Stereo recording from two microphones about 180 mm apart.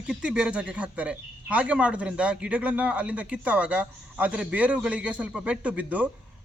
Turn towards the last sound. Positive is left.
turn(degrees=-10)  # may be behind; listen again after turning